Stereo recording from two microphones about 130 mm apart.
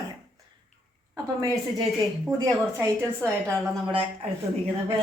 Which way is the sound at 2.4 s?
20° right (ahead or behind).